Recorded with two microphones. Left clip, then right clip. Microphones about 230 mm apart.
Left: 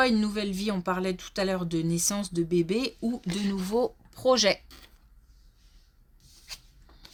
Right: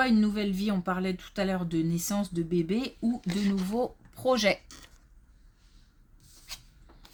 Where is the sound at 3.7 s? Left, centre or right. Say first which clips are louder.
Left 4 dB; left.